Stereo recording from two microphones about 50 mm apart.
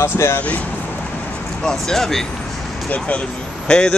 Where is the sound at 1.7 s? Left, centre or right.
Centre.